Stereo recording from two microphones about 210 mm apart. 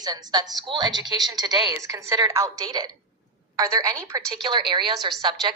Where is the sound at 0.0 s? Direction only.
20° right (ahead or behind).